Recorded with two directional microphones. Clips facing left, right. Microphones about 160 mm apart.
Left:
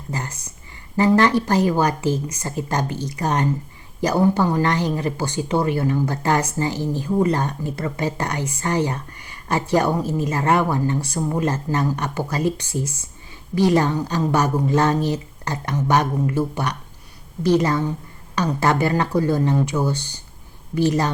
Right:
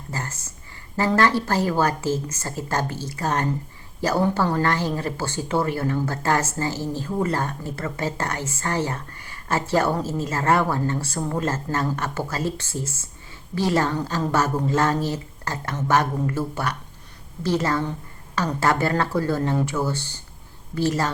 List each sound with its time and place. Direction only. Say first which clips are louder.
0.1 s a woman's voice: left 3 dB; 15° left (ahead or behind)